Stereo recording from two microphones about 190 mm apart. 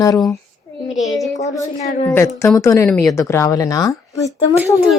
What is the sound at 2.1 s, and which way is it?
Speech, 15° left (ahead or behind).